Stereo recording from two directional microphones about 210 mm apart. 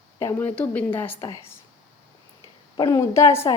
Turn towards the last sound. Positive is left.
turn(degrees=15)  # may be behind; listen again after turning